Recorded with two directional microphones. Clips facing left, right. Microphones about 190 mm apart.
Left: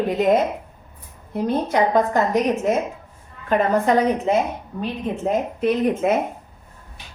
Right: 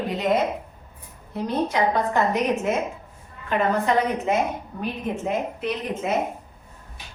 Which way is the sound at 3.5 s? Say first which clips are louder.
Left 4 dB; 40° left (ahead or behind).